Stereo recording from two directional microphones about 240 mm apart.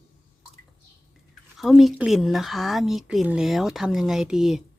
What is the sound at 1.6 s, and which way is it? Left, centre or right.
Speech, centre.